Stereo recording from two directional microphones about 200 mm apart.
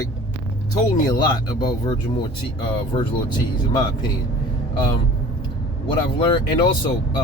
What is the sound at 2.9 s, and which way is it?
Speech, 25° left (ahead or behind).